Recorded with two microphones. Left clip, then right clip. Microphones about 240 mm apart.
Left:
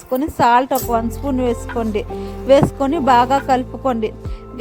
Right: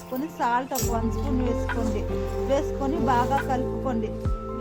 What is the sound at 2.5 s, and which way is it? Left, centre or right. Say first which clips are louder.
A woman's voice: left 13 dB; left.